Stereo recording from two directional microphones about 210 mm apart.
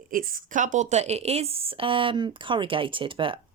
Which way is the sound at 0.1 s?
40° right (ahead or behind).